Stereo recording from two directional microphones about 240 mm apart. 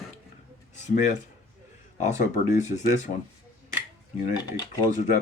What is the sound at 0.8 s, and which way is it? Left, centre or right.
Speech, left.